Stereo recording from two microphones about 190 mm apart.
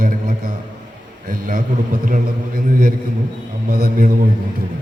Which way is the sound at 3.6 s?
50° right (ahead or behind).